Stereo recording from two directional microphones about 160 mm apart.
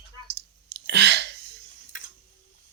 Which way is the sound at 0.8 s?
90° right.